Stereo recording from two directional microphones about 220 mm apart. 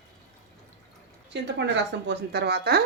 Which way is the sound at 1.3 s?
55° right (ahead or behind).